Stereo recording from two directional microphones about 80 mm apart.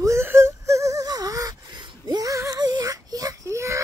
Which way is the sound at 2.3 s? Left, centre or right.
Right.